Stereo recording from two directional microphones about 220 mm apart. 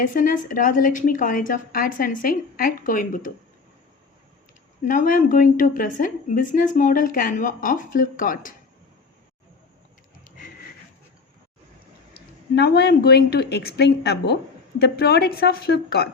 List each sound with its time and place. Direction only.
0.0 s a woman's voice: 40° left (ahead or behind)
4.9 s a woman's voice: 40° left (ahead or behind)
12.5 s a woman's voice: 45° left (ahead or behind)